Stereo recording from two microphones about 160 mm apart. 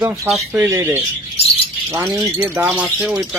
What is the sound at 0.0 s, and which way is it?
Speech, 20° right (ahead or behind).